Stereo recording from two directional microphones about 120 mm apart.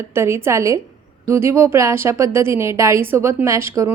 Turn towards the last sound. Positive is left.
turn(degrees=-25)  # may be behind; listen again after turning